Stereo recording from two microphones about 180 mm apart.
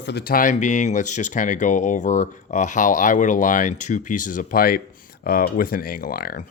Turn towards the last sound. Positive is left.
turn(degrees=55)  # may be behind; listen again after turning